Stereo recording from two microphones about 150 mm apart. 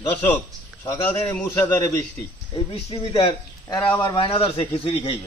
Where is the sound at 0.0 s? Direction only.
15° left (ahead or behind).